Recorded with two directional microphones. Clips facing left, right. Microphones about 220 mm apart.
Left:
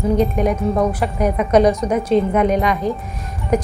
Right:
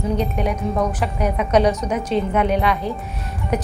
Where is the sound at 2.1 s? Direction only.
45° left (ahead or behind).